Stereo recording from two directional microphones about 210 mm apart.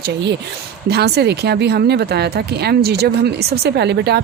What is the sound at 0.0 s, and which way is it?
A woman's voice, 55° right (ahead or behind).